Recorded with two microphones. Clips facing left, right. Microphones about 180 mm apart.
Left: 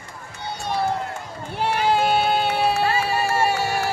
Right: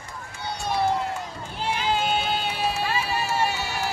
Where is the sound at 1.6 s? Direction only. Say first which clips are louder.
Left 5 dB; 60° left (ahead or behind).